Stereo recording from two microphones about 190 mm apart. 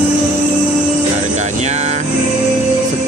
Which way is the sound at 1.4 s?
35° right (ahead or behind).